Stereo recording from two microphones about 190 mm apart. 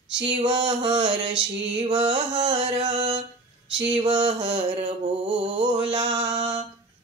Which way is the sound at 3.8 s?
25° right (ahead or behind).